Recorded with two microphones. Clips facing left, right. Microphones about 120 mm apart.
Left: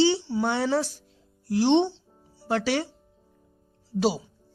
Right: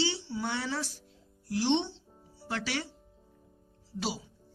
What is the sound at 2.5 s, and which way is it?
Speech, 30° left (ahead or behind).